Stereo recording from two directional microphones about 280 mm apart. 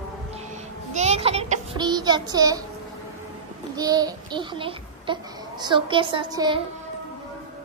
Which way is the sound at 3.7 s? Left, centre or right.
Centre.